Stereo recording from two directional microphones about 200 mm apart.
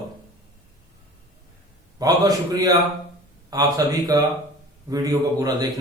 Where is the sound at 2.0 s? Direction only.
20° right (ahead or behind).